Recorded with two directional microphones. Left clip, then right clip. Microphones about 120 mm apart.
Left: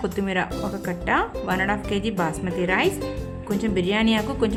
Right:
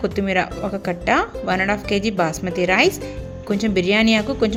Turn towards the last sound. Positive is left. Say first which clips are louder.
# right 4 dB
turn(degrees=-25)  # may be behind; listen again after turning